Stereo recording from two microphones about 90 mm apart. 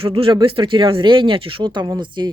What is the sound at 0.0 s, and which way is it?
Speech, 90° right.